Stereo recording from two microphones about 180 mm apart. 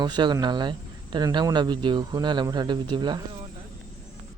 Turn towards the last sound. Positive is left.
turn(degrees=-25)  # may be behind; listen again after turning